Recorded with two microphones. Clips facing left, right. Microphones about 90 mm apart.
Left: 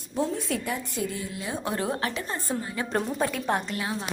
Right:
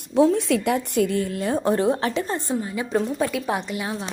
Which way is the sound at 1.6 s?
30° right (ahead or behind).